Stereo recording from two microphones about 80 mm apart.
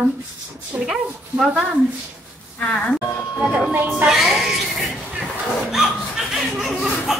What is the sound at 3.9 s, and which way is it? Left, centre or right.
Speech, centre.